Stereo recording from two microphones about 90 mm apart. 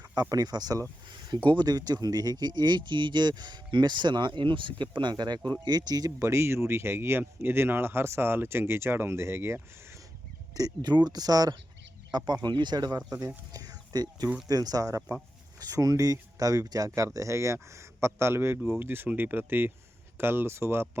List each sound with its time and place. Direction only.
0.2 s speech: 45° right (ahead or behind)
1.0 s a sound: 55° right (ahead or behind)
1.5 s speech: 50° right (ahead or behind); by 9.6 s 30° right (ahead or behind)
10.5 s speech: 50° right (ahead or behind)
13.1 s speech: 40° right (ahead or behind)